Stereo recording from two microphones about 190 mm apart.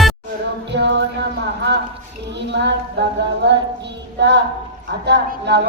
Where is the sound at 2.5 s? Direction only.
65° right (ahead or behind).